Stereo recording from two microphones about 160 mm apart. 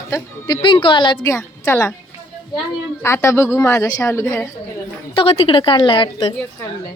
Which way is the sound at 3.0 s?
15° left (ahead or behind).